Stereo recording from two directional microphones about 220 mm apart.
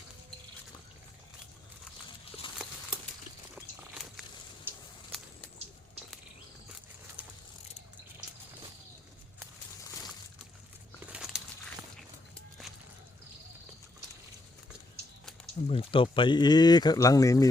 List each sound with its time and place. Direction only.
7.2 s ratchet: 5° right (ahead or behind)
11.0 s a sound: 5° right (ahead or behind)
15.7 s speech: 25° left (ahead or behind)